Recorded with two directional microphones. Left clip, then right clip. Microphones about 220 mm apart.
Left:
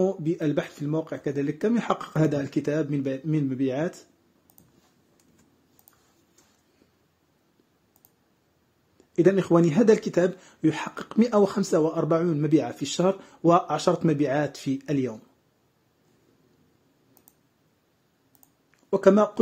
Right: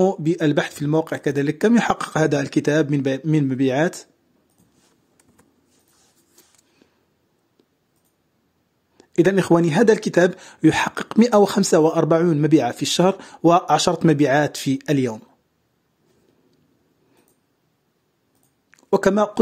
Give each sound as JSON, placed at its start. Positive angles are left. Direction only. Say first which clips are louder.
{"t": 0.0, "sound": "speech", "louder": "right 7 dB", "side_deg": -25}
{"t": 8.9, "sound": "speech", "louder": "right 4 dB", "side_deg": -25}
{"t": 18.7, "sound": "speech", "louder": "right 1 dB", "side_deg": -25}